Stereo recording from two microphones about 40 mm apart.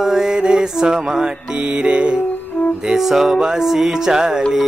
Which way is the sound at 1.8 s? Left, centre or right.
Right.